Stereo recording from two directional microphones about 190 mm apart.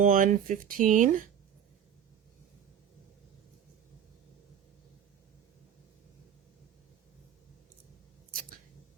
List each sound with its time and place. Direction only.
0.0 s speech: 45° right (ahead or behind)